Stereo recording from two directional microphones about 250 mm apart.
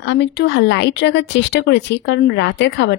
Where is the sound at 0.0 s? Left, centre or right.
Left.